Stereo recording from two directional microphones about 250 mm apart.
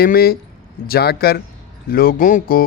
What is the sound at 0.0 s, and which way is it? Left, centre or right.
A man's voice, left.